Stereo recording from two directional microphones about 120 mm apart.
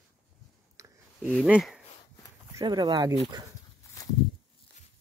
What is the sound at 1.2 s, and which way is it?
Speech, 10° right (ahead or behind).